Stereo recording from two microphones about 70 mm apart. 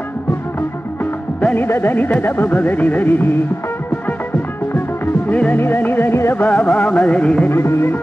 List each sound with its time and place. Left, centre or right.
1.4 s carnatic music: left
5.3 s carnatic music: left
5.6 s music: left
6.4 s carnatic music: left
7.4 s music: left